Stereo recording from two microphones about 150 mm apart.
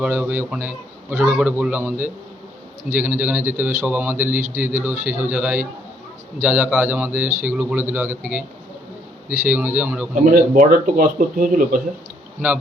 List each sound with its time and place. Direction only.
0.0 s speech: 10° right (ahead or behind)
9.5 s speech: 10° right (ahead or behind)
10.2 s speech: 60° right (ahead or behind)